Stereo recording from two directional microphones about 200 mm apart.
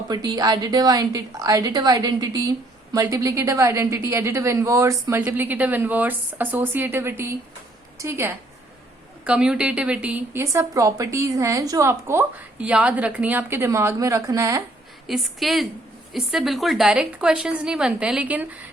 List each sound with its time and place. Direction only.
0.1 s a woman's voice: 20° right (ahead or behind)
15.0 s a woman's voice: centre (ahead or behind)